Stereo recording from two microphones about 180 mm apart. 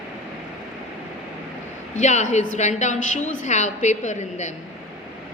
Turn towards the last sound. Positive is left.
turn(degrees=40)  # may be behind; listen again after turning